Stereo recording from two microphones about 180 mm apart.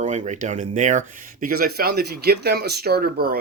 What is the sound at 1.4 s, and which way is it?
Speech, 55° right (ahead or behind).